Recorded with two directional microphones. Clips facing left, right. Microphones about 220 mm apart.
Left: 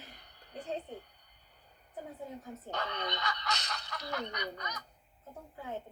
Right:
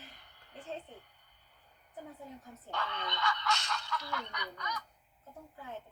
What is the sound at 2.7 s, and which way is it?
Speech, 40° left (ahead or behind).